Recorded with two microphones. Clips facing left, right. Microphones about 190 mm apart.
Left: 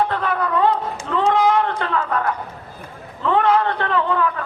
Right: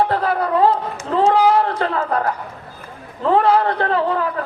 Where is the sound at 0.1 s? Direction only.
35° right (ahead or behind).